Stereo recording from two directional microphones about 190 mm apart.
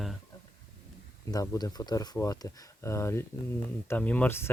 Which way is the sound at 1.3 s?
20° left (ahead or behind).